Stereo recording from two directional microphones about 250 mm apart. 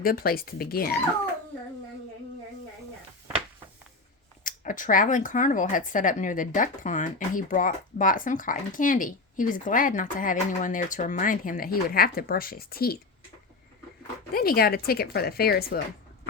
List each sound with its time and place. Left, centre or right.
0.0 s speech: left
4.4 s speech: left
14.3 s speech: left